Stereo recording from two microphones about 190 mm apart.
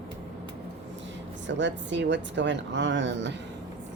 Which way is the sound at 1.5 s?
70° right (ahead or behind).